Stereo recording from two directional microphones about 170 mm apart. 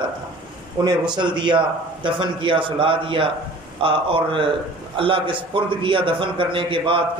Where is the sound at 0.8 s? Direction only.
25° right (ahead or behind).